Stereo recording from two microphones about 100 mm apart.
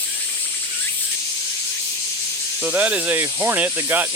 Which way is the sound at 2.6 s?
15° right (ahead or behind).